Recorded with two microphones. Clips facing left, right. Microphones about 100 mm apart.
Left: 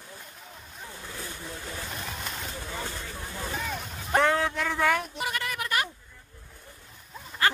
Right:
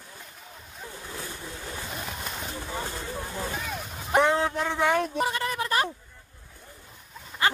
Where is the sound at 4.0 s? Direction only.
15° right (ahead or behind).